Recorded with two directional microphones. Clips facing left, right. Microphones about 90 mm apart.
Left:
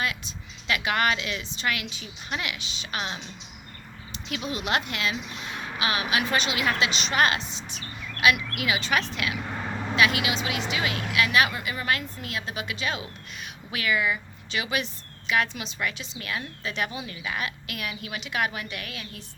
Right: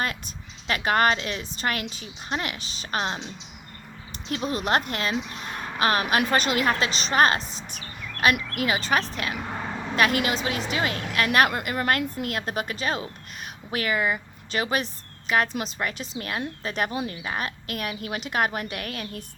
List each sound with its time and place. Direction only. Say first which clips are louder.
0.0 s a woman's voice: right 1 dB; 45° right (ahead or behind)